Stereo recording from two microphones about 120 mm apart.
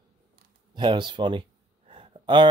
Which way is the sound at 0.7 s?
40° right (ahead or behind).